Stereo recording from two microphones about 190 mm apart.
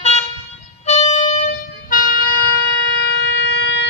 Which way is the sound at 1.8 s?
45° left (ahead or behind).